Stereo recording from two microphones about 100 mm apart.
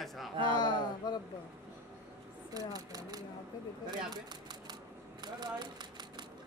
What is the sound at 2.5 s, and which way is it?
Speech, 40° right (ahead or behind).